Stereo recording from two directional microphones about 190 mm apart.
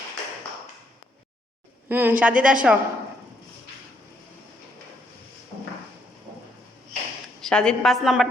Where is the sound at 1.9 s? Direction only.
10° right (ahead or behind).